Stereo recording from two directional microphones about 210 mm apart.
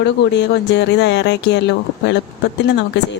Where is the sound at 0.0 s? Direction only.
55° left (ahead or behind).